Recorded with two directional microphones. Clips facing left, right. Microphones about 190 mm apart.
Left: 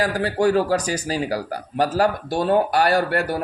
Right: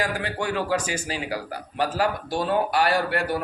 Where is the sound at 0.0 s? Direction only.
40° left (ahead or behind).